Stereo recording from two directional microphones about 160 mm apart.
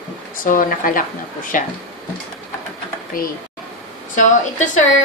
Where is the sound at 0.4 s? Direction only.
60° left (ahead or behind).